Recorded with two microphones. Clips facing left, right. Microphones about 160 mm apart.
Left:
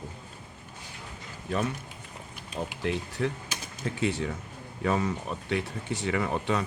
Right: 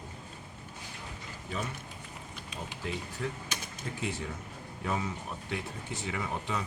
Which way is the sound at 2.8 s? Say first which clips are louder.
Left 6 dB; 70° left (ahead or behind).